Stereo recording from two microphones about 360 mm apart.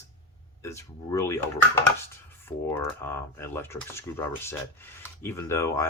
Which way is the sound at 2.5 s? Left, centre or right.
Centre.